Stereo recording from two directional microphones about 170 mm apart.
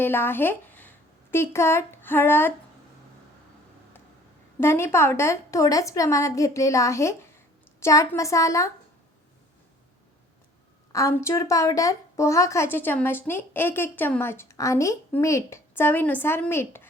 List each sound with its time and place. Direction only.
0.0 s speech: 15° left (ahead or behind)
4.6 s a woman's voice: 15° left (ahead or behind)
10.9 s a woman's voice: 15° left (ahead or behind)